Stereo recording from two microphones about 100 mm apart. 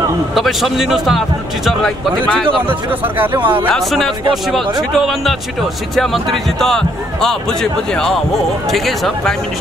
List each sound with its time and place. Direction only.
0.3 s speech: centre (ahead or behind)
2.9 s speech: 20° right (ahead or behind)
3.6 s speech: 5° left (ahead or behind)